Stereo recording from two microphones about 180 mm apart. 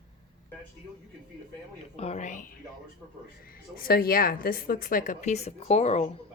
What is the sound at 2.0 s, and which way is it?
Speech, 40° left (ahead or behind).